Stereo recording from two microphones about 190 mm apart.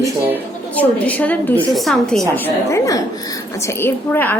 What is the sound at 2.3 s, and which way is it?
A woman's voice, 10° left (ahead or behind).